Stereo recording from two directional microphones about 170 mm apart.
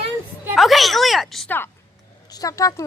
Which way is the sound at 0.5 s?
Centre (ahead or behind).